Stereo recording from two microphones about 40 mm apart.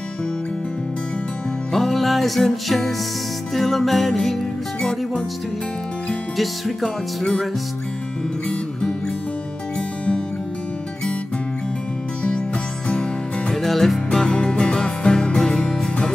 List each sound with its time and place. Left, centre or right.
1.7 s music: centre
6.3 s music: centre
13.5 s music: centre
14.2 s music: left